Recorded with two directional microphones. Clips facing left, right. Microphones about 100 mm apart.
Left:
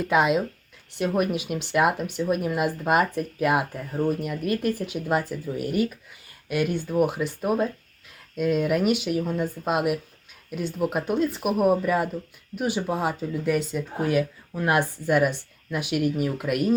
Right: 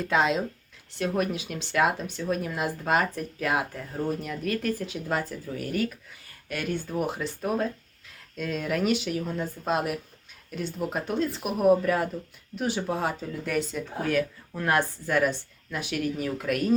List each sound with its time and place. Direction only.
0.1 s speech: 15° left (ahead or behind)